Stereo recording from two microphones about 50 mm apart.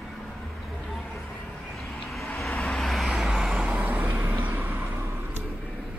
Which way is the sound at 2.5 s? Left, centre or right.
Left.